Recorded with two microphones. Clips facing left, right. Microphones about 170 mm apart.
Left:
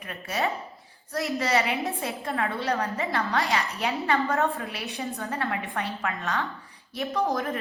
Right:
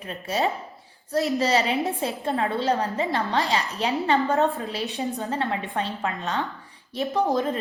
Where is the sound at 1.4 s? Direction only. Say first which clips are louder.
Right 3 dB; 35° right (ahead or behind).